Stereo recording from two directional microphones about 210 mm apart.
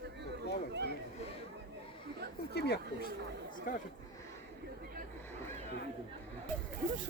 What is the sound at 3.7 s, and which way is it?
Speech, 40° left (ahead or behind).